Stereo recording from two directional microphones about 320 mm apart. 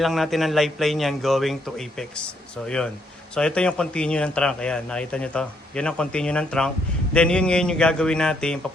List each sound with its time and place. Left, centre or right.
0.0 s speech: centre